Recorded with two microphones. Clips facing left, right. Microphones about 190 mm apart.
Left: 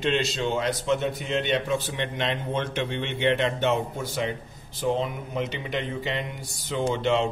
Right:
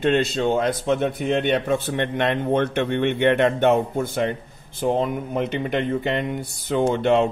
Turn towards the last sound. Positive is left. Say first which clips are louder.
# right 5 dB
turn(degrees=-55)  # may be behind; listen again after turning